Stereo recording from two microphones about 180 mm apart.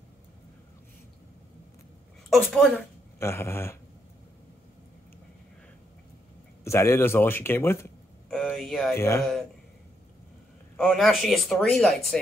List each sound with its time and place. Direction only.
2.2 s a woman's voice: centre (ahead or behind)
3.2 s speech: 15° left (ahead or behind)
6.6 s speech: 15° left (ahead or behind)
8.3 s speech: centre (ahead or behind)
8.9 s speech: 15° left (ahead or behind)
10.8 s speech: centre (ahead or behind)